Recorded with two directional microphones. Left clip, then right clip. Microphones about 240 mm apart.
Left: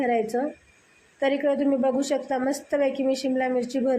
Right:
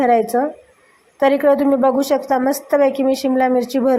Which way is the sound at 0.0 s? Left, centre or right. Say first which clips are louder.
Right 9 dB; centre.